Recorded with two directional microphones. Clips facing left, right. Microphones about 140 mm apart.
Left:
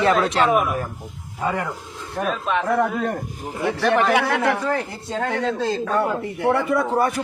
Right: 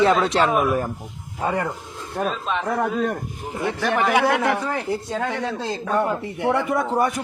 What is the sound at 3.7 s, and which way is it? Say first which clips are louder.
A man's voice: left 2 dB; 15° right (ahead or behind).